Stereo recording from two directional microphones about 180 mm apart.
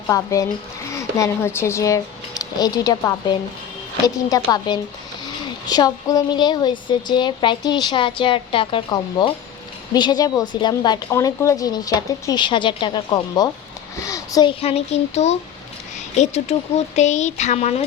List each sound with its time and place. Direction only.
0.1 s a woman's voice: 20° left (ahead or behind)
14.6 s speech: 35° left (ahead or behind)